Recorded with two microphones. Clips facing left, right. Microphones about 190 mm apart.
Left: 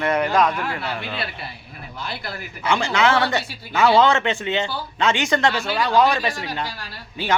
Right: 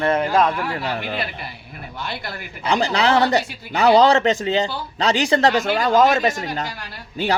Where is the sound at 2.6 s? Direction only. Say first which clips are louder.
Right 1 dB; 35° right (ahead or behind).